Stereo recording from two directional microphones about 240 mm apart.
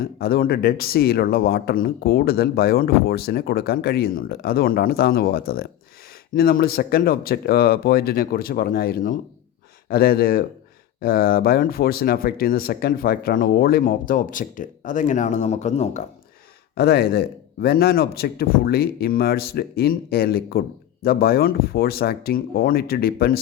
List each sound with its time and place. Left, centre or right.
0.0 s a man's voice: left
16.7 s a man's voice: left